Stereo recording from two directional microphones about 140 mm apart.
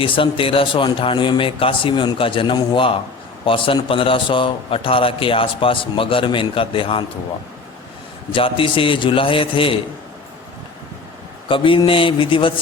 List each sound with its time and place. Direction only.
0.0 s a man's voice: 40° left (ahead or behind)
8.3 s a man's voice: 40° left (ahead or behind)
11.4 s a man's voice: 40° left (ahead or behind)